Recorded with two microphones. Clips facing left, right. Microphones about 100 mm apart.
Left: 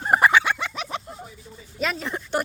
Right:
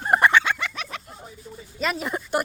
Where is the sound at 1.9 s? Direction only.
10° right (ahead or behind).